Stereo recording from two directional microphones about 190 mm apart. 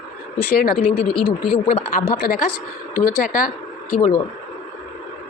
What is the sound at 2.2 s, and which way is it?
A woman's voice, 55° left (ahead or behind).